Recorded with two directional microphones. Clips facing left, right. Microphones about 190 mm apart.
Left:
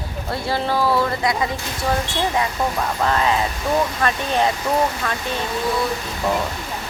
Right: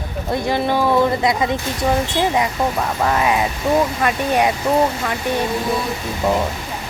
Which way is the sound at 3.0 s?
10° right (ahead or behind).